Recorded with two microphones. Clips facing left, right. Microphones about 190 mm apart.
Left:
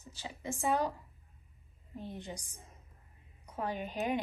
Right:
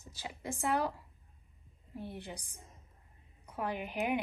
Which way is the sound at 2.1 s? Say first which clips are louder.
Left 4 dB; 60° right (ahead or behind).